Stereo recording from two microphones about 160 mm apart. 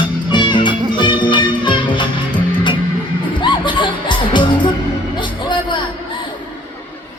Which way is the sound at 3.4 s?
30° left (ahead or behind).